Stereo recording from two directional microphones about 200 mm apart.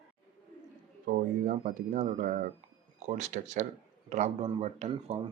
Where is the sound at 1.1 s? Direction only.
40° right (ahead or behind).